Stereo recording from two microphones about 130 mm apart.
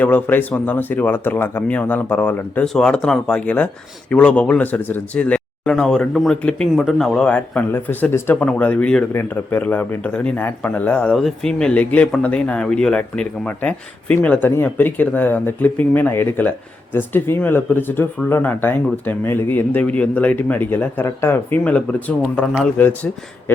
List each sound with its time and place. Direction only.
0.0 s a man's voice: 15° left (ahead or behind)